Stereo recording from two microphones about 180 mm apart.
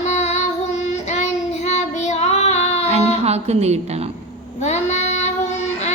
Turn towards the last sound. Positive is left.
turn(degrees=40)  # may be behind; listen again after turning